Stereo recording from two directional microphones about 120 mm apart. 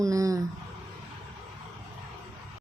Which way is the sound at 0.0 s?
30° right (ahead or behind).